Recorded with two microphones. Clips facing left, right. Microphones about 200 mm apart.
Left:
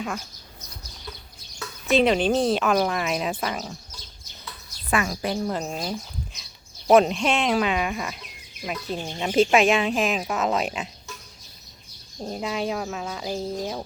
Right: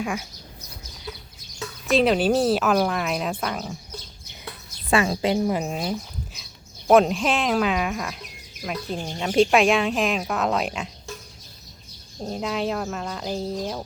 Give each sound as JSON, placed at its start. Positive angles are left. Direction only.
{"t": 0.0, "sound": "speech", "side_deg": -5}
{"t": 1.9, "sound": "speech", "side_deg": 0}
{"t": 4.9, "sound": "a woman's voice", "side_deg": -25}
{"t": 5.5, "sound": "speech", "side_deg": -5}
{"t": 12.2, "sound": "speech", "side_deg": 0}